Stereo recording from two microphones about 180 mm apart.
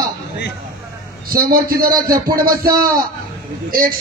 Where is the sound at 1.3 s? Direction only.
55° right (ahead or behind).